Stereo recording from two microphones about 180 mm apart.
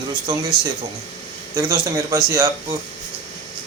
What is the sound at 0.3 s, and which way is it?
Speech, 20° right (ahead or behind).